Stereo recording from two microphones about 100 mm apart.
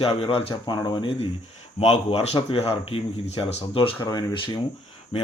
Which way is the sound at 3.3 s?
50° left (ahead or behind).